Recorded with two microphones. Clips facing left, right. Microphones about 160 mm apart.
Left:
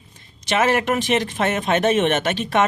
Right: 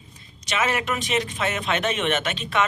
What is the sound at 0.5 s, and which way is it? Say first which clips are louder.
A man's voice: left 6 dB; 50° left (ahead or behind).